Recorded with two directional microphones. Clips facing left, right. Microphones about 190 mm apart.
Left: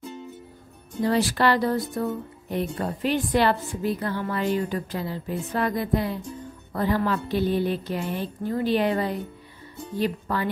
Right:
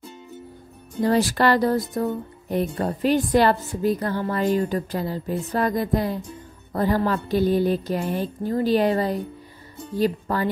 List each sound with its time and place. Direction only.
1.0 s a woman's voice: 40° right (ahead or behind)